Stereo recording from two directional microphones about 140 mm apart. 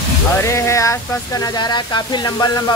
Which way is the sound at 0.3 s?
20° left (ahead or behind).